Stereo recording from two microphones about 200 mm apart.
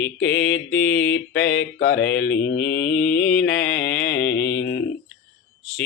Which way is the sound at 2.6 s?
5° left (ahead or behind).